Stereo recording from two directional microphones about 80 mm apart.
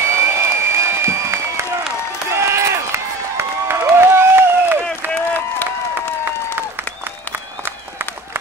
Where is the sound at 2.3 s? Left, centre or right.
Right.